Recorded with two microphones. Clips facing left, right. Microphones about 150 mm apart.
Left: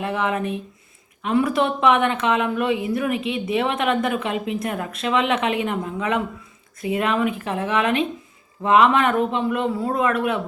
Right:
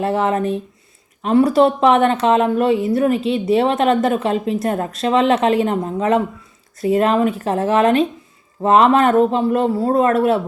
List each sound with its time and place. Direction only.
0.0 s a woman's voice: 35° right (ahead or behind)